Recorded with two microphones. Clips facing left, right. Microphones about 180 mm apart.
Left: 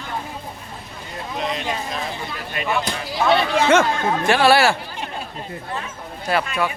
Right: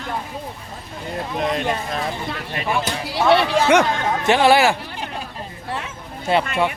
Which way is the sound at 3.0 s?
70° right (ahead or behind).